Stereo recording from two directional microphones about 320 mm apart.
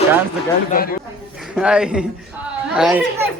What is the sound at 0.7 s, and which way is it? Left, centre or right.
Speech, left.